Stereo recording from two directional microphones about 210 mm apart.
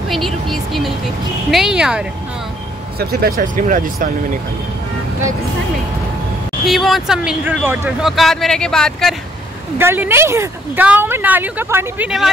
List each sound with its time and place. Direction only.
0.1 s speech: centre (ahead or behind)
3.0 s speech: 50° right (ahead or behind)
6.6 s speech: centre (ahead or behind)
8.2 s speech: centre (ahead or behind)
9.8 s speech: 10° right (ahead or behind)